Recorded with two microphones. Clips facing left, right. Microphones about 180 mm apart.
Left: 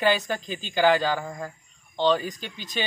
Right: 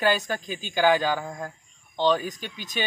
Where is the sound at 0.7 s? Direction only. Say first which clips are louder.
Even; 10° right (ahead or behind).